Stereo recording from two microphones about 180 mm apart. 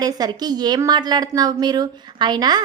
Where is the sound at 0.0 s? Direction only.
20° right (ahead or behind).